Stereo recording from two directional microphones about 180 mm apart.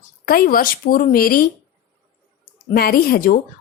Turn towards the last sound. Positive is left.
turn(degrees=55)  # may be behind; listen again after turning